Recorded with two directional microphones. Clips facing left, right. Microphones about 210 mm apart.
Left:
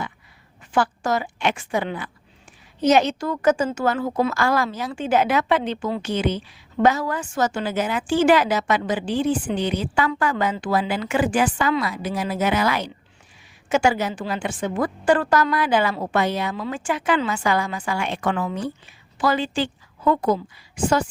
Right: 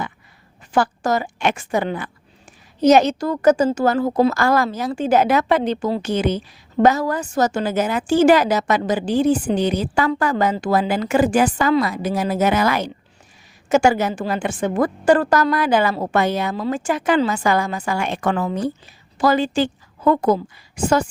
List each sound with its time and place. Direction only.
0.7 s a woman's voice: 40° right (ahead or behind)